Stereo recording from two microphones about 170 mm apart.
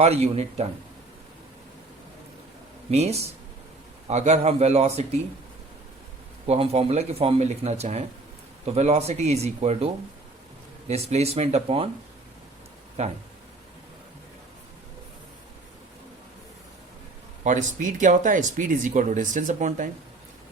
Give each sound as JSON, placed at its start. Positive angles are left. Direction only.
{"t": 0.0, "sound": "speech", "side_deg": -40}
{"t": 2.9, "sound": "speech", "side_deg": -40}
{"t": 6.5, "sound": "speech", "side_deg": -35}
{"t": 13.0, "sound": "speech", "side_deg": -40}
{"t": 17.4, "sound": "speech", "side_deg": -45}